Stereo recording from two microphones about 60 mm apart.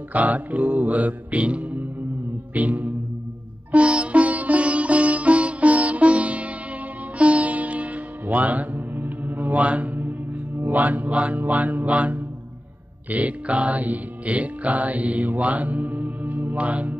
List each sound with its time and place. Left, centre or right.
0.1 s mantra: right
2.5 s music: right
10.7 s mantra: right
13.1 s music: right